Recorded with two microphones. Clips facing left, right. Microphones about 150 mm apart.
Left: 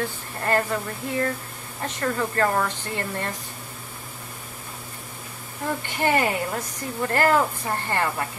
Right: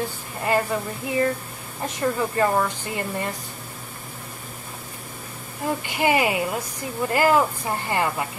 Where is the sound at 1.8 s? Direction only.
10° right (ahead or behind).